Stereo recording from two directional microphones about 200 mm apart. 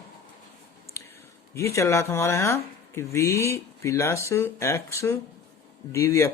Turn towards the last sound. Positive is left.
turn(degrees=15)  # may be behind; listen again after turning